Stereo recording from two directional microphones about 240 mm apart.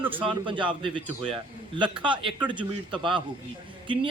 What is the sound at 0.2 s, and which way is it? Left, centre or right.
A man's voice, right.